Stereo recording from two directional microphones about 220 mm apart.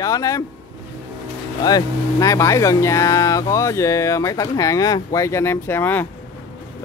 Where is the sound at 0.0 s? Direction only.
15° left (ahead or behind).